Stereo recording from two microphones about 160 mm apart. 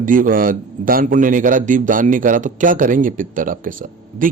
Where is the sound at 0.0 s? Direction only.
55° right (ahead or behind).